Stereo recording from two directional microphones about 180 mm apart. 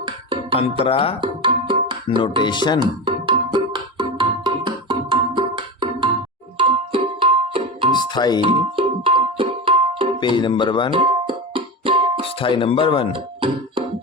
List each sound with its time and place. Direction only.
0.9 s speech: 30° left (ahead or behind)
1.2 s music: 25° right (ahead or behind)
2.4 s speech: 25° left (ahead or behind)
2.8 s music: 25° right (ahead or behind)
7.9 s music: 25° left (ahead or behind)
8.4 s music: 30° right (ahead or behind)
10.2 s speech: 25° left (ahead or behind)
10.9 s music: 30° right (ahead or behind)
12.4 s speech: 30° left (ahead or behind)
13.1 s speech: 30° right (ahead or behind)